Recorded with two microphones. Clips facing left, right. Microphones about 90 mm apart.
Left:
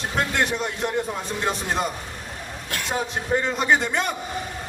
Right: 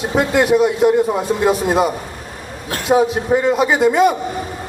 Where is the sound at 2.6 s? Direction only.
50° right (ahead or behind).